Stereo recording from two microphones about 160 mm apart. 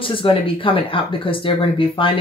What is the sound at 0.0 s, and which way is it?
Speech, 35° left (ahead or behind).